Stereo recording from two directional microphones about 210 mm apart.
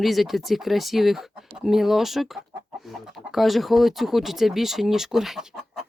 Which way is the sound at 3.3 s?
Centre (ahead or behind).